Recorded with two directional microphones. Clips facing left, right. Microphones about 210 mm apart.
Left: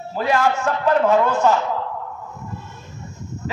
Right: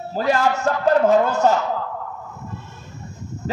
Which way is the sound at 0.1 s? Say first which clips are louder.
Even; 40° right (ahead or behind).